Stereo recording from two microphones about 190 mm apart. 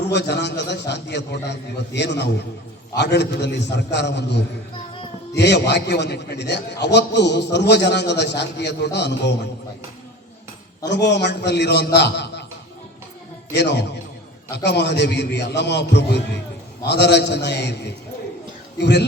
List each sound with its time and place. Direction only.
0.1 s a man's voice: 65° left (ahead or behind)
10.8 s a man's voice: 65° left (ahead or behind)
13.5 s a man's voice: 65° left (ahead or behind)